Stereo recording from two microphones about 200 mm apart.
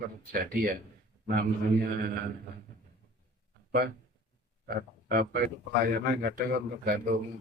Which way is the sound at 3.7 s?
50° right (ahead or behind).